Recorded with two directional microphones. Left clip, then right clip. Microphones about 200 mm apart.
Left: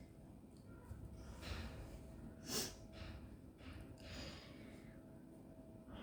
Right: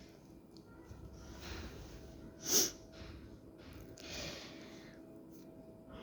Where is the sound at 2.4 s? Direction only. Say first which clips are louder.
Right 12 dB; 40° right (ahead or behind).